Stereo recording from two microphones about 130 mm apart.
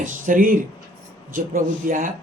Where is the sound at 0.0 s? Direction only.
90° right.